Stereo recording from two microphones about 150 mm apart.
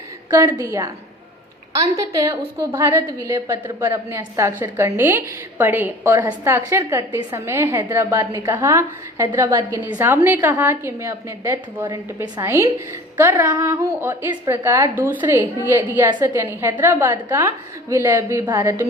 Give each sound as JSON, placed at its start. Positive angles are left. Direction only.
{"t": 0.3, "sound": "a woman's voice", "side_deg": -25}